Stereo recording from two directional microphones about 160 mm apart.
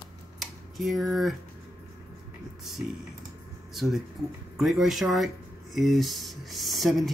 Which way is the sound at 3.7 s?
Centre (ahead or behind).